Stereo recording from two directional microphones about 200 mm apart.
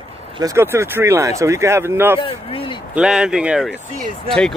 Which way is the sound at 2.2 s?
25° left (ahead or behind).